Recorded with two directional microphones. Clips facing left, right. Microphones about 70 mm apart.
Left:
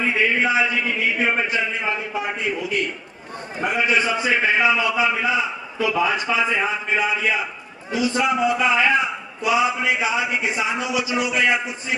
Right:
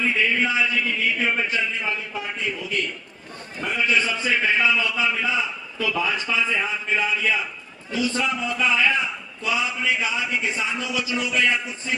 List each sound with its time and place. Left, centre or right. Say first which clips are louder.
0.0 s a man's voice: left 2 dB; left
3.6 s a man's voice: left 3 dB; centre